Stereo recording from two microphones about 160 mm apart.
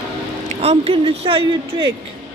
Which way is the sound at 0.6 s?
40° right (ahead or behind).